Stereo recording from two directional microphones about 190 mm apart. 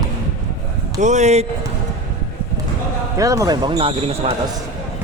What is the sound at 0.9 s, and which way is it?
Speech, 40° right (ahead or behind).